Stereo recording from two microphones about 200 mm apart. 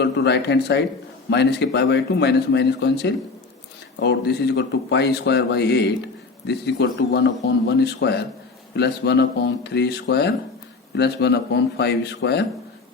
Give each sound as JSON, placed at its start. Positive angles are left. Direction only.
{"t": 0.0, "sound": "speech", "side_deg": 60}